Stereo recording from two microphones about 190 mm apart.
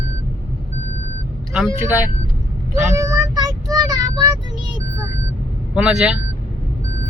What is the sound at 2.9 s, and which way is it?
Child singing, 15° right (ahead or behind).